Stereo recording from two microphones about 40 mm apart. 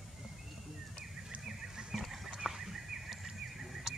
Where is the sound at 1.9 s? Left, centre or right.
Centre.